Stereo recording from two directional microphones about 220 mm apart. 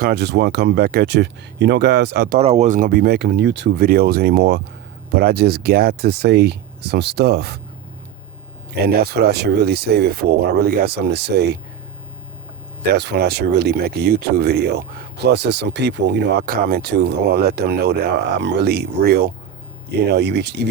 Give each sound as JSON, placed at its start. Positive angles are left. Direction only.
{"t": 0.0, "sound": "speech", "side_deg": -45}
{"t": 2.4, "sound": "speech", "side_deg": -30}
{"t": 8.9, "sound": "speech", "side_deg": -45}
{"t": 12.9, "sound": "speech", "side_deg": -50}